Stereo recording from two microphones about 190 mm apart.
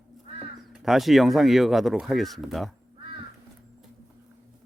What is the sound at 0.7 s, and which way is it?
Speech, centre (ahead or behind).